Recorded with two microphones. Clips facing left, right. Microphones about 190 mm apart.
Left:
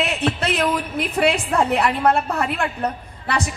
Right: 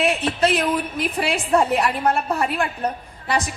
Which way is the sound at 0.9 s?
60° left (ahead or behind).